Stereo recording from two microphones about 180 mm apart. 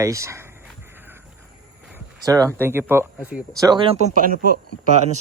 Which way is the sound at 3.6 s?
25° right (ahead or behind).